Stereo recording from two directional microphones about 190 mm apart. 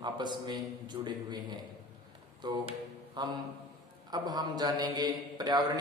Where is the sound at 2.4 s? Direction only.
20° right (ahead or behind).